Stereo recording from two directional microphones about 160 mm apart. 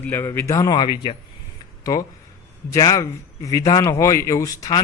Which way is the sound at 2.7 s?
20° left (ahead or behind).